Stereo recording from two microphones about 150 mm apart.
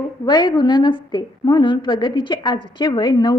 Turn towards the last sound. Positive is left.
turn(degrees=30)  # may be behind; listen again after turning